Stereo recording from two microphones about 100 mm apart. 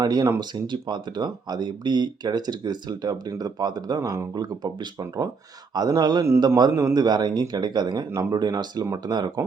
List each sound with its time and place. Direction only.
0.0 s speech: 40° right (ahead or behind)